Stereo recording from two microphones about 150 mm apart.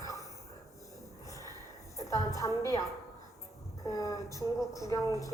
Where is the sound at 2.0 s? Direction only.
20° left (ahead or behind).